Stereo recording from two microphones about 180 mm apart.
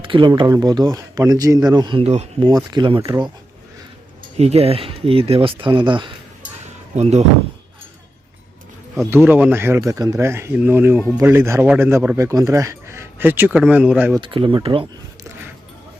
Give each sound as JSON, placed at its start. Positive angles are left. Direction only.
{"t": 0.0, "sound": "speech", "side_deg": -30}
{"t": 4.4, "sound": "speech", "side_deg": -35}
{"t": 6.9, "sound": "speech", "side_deg": -40}
{"t": 9.0, "sound": "speech", "side_deg": -10}
{"t": 14.2, "sound": "speech", "side_deg": -30}